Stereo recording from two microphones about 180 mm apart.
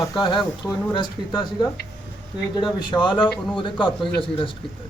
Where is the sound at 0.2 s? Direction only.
25° left (ahead or behind).